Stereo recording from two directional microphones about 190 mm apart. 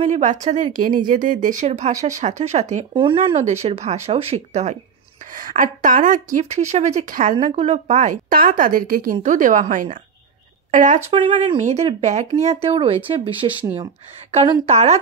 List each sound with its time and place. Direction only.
0.0 s speech: 40° right (ahead or behind)
2.7 s speech: 25° right (ahead or behind)
5.3 s a woman's voice: 45° right (ahead or behind); by 13.7 s 30° right (ahead or behind)
14.7 s speech: 35° right (ahead or behind)